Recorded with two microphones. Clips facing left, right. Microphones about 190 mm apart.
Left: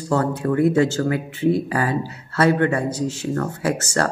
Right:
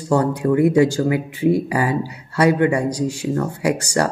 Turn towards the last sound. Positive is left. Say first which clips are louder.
# right 3 dB
turn(degrees=-15)  # may be behind; listen again after turning